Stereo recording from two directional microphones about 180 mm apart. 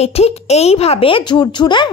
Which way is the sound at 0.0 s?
35° left (ahead or behind).